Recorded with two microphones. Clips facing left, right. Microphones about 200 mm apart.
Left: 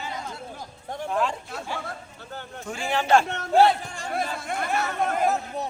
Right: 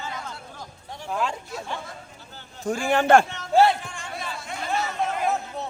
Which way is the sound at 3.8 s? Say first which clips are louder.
Left 2 dB; 40° left (ahead or behind).